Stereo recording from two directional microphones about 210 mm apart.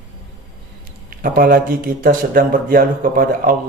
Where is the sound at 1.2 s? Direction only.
45° right (ahead or behind).